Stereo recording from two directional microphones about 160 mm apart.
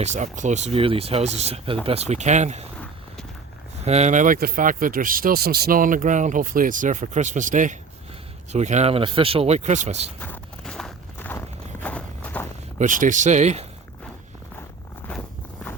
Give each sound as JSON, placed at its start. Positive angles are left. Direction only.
{"t": 0.0, "sound": "speech", "side_deg": -45}
{"t": 3.8, "sound": "speech", "side_deg": -45}
{"t": 10.2, "sound": "walk", "side_deg": 10}
{"t": 11.3, "sound": "a sound", "side_deg": 10}
{"t": 12.8, "sound": "speech", "side_deg": -55}